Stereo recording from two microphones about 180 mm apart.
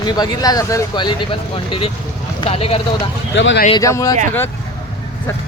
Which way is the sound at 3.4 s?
90° left.